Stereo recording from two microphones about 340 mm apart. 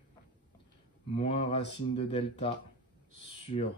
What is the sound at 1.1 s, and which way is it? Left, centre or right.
Speech, centre.